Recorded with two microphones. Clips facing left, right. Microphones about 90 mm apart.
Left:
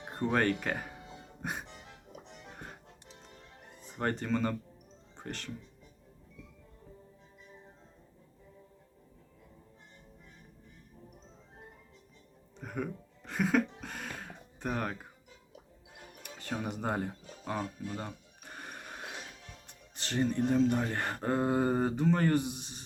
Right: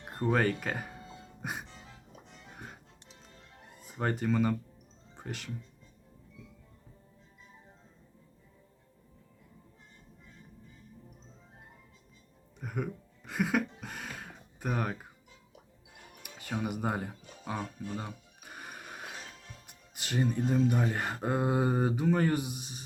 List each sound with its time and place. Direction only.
0.0 s music: 20° left (ahead or behind)
0.3 s speech: 5° right (ahead or behind)
0.9 s music: 15° left (ahead or behind)
1.4 s music: 5° right (ahead or behind)
1.6 s music: 20° left (ahead or behind)
3.8 s speech: 5° right (ahead or behind)
12.5 s a sound: 5° right (ahead or behind)
16.2 s music: 10° right (ahead or behind)
16.6 s speech: 5° right (ahead or behind)
17.9 s music: 5° right (ahead or behind)
19.6 s speech: 10° right (ahead or behind)